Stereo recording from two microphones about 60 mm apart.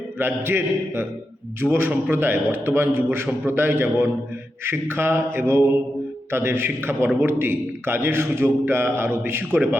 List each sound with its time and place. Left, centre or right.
0.2 s a man's voice: right
1.6 s a man's voice: centre
2.1 s a man's voice: right